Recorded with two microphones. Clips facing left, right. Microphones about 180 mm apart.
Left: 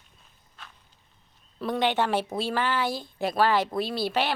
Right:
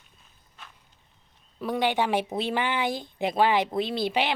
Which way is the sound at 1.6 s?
10° right (ahead or behind).